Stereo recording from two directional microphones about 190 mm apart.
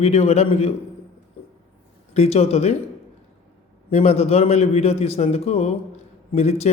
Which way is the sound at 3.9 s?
35° left (ahead or behind).